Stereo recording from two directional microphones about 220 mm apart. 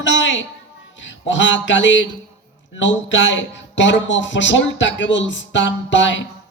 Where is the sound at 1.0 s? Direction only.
55° left (ahead or behind).